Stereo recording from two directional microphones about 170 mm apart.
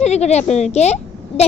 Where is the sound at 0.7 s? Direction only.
40° left (ahead or behind).